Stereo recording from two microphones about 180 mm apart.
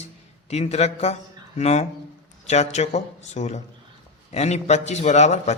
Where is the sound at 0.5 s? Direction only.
35° left (ahead or behind).